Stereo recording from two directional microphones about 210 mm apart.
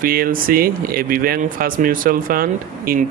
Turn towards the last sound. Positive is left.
turn(degrees=-45)  # may be behind; listen again after turning